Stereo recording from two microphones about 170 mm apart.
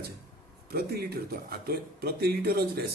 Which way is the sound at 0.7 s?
65° right (ahead or behind).